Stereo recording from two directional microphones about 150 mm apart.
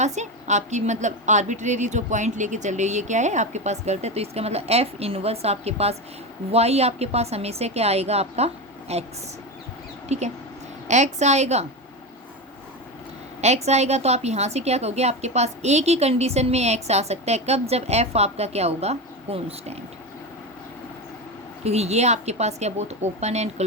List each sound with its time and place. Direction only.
0.0 s a woman's voice: 50° right (ahead or behind)
10.1 s a woman's voice: 50° right (ahead or behind)
13.4 s a woman's voice: 45° right (ahead or behind)
21.6 s a woman's voice: 45° right (ahead or behind)